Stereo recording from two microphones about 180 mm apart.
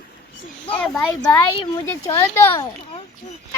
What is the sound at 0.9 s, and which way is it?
Speech, 20° left (ahead or behind).